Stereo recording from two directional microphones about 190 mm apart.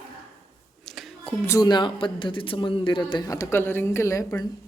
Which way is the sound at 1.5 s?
20° left (ahead or behind).